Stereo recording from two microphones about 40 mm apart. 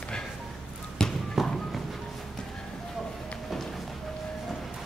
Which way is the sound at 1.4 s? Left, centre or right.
Centre.